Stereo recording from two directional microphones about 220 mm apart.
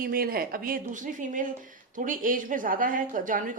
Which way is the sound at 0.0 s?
40° right (ahead or behind).